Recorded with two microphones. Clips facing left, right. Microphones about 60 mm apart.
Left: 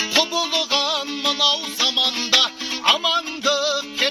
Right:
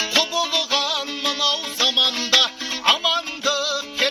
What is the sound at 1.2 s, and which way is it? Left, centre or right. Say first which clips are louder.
Music: left 2 dB; right.